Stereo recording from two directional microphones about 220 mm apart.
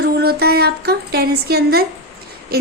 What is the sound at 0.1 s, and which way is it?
A woman's voice, 45° right (ahead or behind).